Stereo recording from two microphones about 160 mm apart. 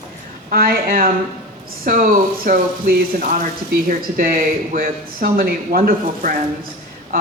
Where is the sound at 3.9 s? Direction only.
60° right (ahead or behind).